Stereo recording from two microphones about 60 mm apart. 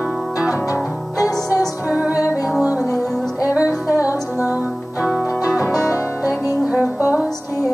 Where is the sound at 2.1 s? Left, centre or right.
Left.